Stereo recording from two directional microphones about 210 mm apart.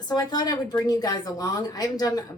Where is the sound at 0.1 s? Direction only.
20° left (ahead or behind).